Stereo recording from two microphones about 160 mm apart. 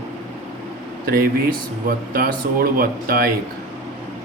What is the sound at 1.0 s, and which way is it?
Speech, 65° right (ahead or behind).